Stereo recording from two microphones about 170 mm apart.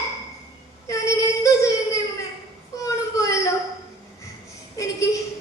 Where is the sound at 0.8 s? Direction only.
20° left (ahead or behind).